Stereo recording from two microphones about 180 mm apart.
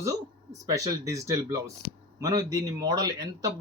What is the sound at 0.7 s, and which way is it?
Speech, 20° right (ahead or behind).